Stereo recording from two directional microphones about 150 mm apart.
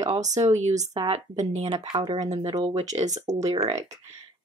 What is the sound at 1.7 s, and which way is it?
Speech, 30° right (ahead or behind).